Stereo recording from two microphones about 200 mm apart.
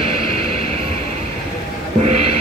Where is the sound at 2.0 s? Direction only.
30° right (ahead or behind).